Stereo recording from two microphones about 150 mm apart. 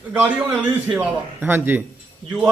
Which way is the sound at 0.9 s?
15° right (ahead or behind).